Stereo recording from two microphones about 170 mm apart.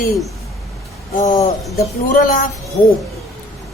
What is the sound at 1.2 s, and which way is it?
Speech, 20° left (ahead or behind).